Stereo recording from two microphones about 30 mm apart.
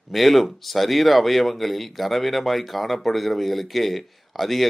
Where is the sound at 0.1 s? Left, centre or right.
Centre.